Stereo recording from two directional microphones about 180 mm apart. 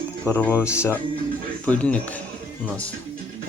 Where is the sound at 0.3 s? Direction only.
10° left (ahead or behind).